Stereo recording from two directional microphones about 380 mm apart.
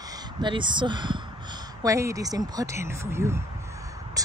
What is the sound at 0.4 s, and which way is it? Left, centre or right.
Speech, centre.